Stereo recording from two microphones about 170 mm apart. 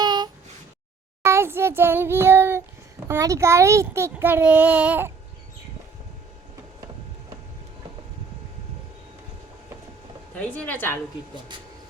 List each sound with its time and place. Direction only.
0.0 s a sound: 25° right (ahead or behind)
1.2 s a child's voice: 15° right (ahead or behind)
10.3 s speech: 10° left (ahead or behind)